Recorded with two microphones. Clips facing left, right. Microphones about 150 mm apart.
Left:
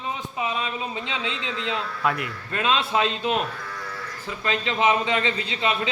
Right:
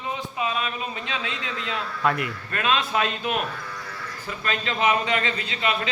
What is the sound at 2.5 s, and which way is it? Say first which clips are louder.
A man's voice: left 2 dB; 20° left (ahead or behind).